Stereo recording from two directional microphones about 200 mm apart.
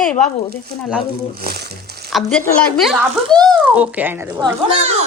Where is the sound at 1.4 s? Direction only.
50° right (ahead or behind).